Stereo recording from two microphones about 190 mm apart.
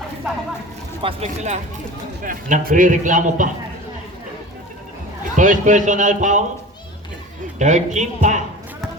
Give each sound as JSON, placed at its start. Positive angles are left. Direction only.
{"t": 1.0, "sound": "speech", "side_deg": -35}
{"t": 2.2, "sound": "a man's voice", "side_deg": -45}
{"t": 5.4, "sound": "speech", "side_deg": -40}
{"t": 7.6, "sound": "speech", "side_deg": -40}